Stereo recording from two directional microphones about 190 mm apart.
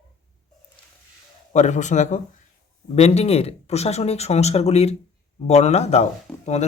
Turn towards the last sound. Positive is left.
turn(degrees=35)  # may be behind; listen again after turning